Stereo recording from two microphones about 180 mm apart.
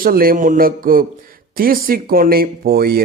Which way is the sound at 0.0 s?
55° right (ahead or behind).